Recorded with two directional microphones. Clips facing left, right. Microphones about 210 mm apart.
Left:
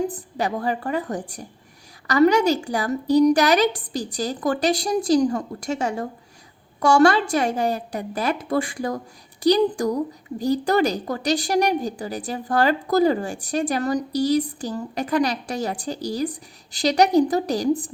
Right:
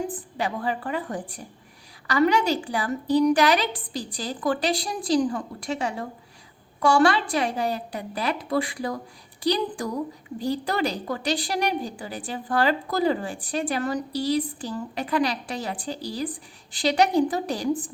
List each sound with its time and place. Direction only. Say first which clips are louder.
0.1 s a woman's voice: left 3 dB; 40° left (ahead or behind)